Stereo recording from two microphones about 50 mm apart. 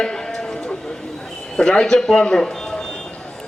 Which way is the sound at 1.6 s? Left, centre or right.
Centre.